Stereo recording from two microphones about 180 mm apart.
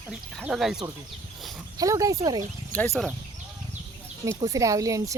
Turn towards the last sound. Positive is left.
turn(degrees=-20)  # may be behind; listen again after turning